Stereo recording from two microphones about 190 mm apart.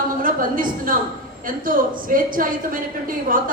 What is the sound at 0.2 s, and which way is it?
A woman's voice, 45° right (ahead or behind).